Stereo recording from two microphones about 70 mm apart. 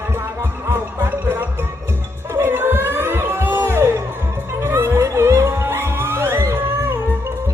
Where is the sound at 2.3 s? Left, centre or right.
Right.